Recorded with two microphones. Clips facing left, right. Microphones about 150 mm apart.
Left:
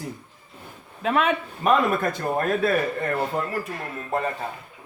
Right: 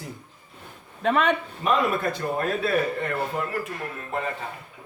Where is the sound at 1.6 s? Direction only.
45° left (ahead or behind).